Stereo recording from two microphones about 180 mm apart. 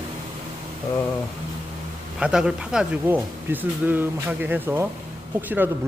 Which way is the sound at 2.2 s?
5° right (ahead or behind).